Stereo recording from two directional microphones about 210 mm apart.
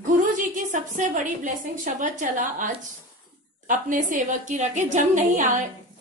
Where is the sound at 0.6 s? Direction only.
35° right (ahead or behind).